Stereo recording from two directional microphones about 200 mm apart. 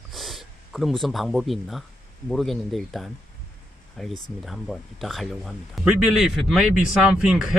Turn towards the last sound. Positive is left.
turn(degrees=-5)  # may be behind; listen again after turning